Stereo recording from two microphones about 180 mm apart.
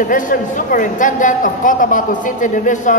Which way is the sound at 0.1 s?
45° left (ahead or behind).